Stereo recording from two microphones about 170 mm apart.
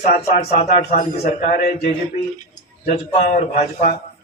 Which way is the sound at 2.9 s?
60° left (ahead or behind).